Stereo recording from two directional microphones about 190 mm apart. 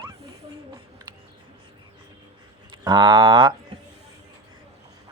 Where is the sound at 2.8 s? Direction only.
25° right (ahead or behind).